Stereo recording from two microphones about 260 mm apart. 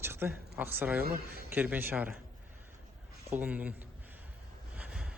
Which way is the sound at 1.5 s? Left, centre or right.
Centre.